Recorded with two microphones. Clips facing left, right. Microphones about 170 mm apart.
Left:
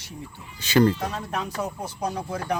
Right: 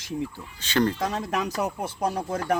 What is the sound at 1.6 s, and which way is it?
Speech, 55° right (ahead or behind).